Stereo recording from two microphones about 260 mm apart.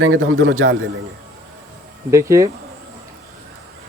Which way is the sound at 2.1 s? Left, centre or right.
Centre.